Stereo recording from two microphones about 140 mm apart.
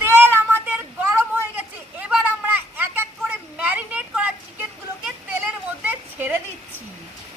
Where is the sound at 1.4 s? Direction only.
10° right (ahead or behind).